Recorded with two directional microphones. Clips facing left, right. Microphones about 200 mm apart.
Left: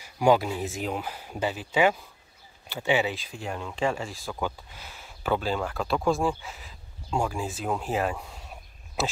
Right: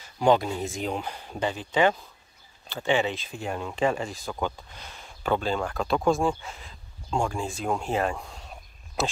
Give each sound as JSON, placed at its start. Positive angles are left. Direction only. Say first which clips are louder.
{"t": 0.0, "sound": "speech", "louder": "even", "side_deg": 10}
{"t": 3.3, "sound": "speech", "louder": "right 2 dB", "side_deg": -45}
{"t": 4.0, "sound": "speech", "louder": "right 2 dB", "side_deg": 0}